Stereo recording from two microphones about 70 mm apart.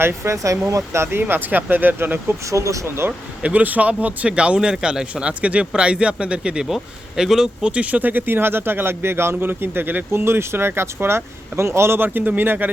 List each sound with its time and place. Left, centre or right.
0.0 s speech: right
1.2 s speech: right
2.5 s speech: right
2.8 s speech: right
3.1 s speech: right